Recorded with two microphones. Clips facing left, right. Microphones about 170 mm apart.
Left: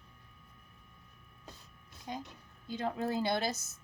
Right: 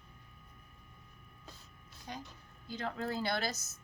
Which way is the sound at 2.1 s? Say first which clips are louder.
Left 4 dB; 20° left (ahead or behind).